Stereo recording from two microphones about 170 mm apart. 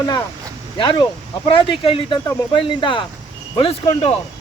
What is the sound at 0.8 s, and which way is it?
Speech, 30° left (ahead or behind).